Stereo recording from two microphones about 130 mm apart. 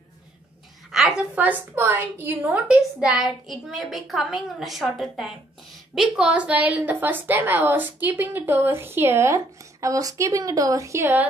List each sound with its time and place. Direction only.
0.9 s a woman's voice: 5° right (ahead or behind)